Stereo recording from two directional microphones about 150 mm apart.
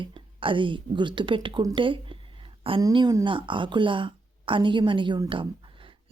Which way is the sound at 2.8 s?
25° right (ahead or behind).